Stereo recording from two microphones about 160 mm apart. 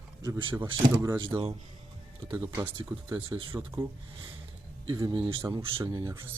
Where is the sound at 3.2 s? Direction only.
30° right (ahead or behind).